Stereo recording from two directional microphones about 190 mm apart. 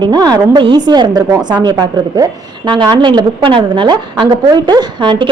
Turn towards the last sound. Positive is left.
turn(degrees=-25)  # may be behind; listen again after turning